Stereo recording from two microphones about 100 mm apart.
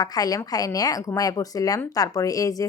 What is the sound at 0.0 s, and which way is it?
A woman's voice, 40° left (ahead or behind).